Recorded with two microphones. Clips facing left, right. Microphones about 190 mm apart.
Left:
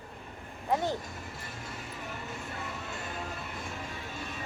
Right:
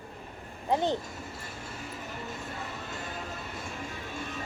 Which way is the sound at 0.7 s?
20° right (ahead or behind).